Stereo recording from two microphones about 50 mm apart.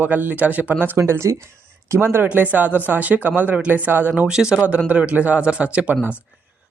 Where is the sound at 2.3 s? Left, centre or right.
Right.